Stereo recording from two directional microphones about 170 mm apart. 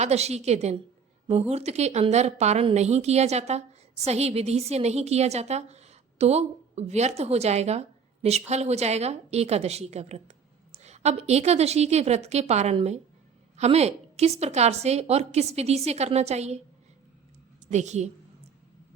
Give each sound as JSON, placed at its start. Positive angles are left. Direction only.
{"t": 0.0, "sound": "a woman's voice", "side_deg": -40}
{"t": 17.7, "sound": "a woman's voice", "side_deg": -45}